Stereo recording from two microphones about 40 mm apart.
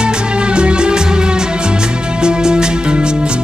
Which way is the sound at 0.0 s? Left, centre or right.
Right.